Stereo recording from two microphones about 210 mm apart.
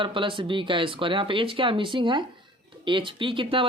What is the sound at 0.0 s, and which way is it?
Speech, 25° right (ahead or behind).